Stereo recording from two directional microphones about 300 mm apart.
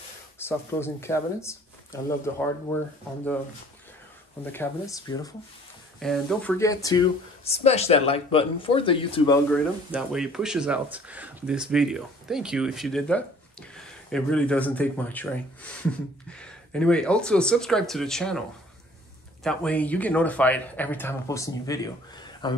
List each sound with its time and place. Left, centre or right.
0.4 s speech: centre
4.5 s speech: centre
9.5 s speech: centre
19.4 s speech: centre